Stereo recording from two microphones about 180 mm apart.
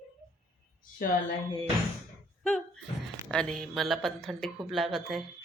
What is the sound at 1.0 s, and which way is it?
Speech, 50° left (ahead or behind).